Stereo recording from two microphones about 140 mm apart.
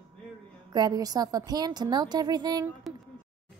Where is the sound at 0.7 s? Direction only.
30° right (ahead or behind).